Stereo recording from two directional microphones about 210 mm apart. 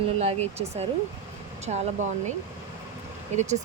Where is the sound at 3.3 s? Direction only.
35° right (ahead or behind).